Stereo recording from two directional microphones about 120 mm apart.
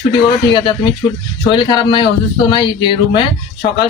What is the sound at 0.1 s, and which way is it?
Speech, 40° left (ahead or behind).